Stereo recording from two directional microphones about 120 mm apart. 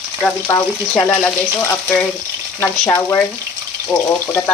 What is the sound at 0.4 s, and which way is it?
Speech, 20° left (ahead or behind).